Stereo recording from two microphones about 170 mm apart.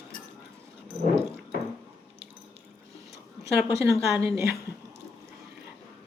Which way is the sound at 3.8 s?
15° right (ahead or behind).